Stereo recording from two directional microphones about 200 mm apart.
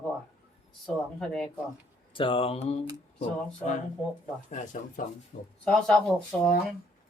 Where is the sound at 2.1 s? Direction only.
25° left (ahead or behind).